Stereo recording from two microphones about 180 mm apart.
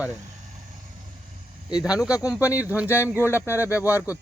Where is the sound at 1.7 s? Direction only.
5° right (ahead or behind).